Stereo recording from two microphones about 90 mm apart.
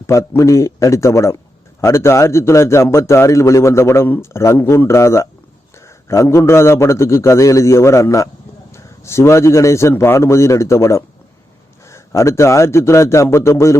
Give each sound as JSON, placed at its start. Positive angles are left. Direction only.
{"t": 0.1, "sound": "a man's voice", "side_deg": 35}